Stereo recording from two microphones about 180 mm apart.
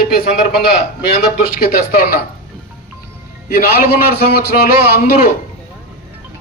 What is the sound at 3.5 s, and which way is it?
A man's voice, 55° left (ahead or behind).